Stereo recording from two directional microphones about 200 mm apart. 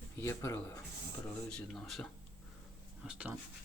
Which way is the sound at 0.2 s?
15° left (ahead or behind).